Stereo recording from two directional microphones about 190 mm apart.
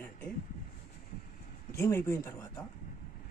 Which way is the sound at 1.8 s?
15° left (ahead or behind).